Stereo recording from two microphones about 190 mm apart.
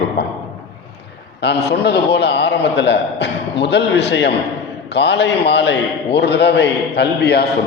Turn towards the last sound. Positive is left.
turn(degrees=60)  # may be behind; listen again after turning